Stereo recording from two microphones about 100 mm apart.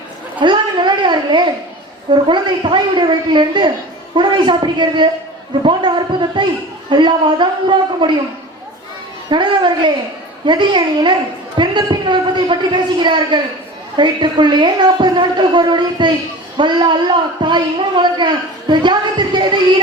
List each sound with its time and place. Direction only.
0.3 s a sound: 50° right (ahead or behind)
2.0 s a woman's voice: 55° right (ahead or behind)
9.3 s a woman's voice: 50° right (ahead or behind)